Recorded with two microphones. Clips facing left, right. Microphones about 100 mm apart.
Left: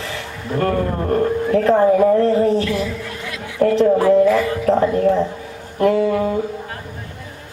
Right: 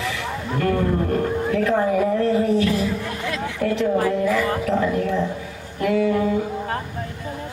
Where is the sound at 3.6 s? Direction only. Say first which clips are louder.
Left 7 dB; 35° left (ahead or behind).